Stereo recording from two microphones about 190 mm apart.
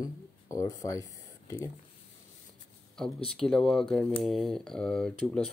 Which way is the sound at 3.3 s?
5° left (ahead or behind).